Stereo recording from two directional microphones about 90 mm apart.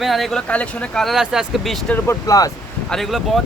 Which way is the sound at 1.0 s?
5° right (ahead or behind).